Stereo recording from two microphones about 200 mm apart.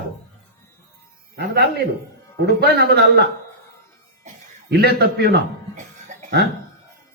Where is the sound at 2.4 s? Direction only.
55° right (ahead or behind).